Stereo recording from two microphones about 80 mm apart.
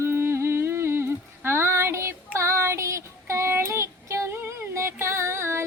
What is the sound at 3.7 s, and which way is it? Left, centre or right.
Child singing, right.